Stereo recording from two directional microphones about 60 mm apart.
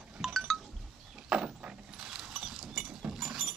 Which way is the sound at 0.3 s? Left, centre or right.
Centre.